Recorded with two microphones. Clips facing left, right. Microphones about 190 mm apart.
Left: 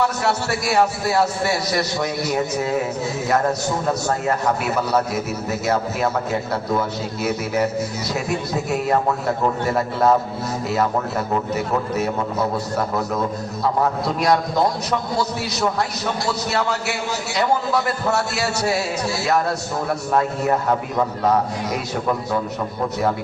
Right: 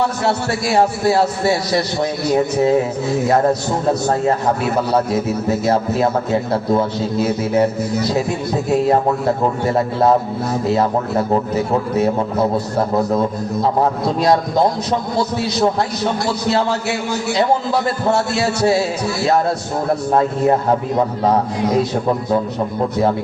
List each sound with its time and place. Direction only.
0.3 s a man's voice: 30° right (ahead or behind)
3.8 s a man's voice: 30° right (ahead or behind)
9.7 s speech: 30° right (ahead or behind)
11.3 s a man's voice: 30° right (ahead or behind)
14.2 s a man's voice: 30° right (ahead or behind)
20.1 s a man's voice: 30° right (ahead or behind)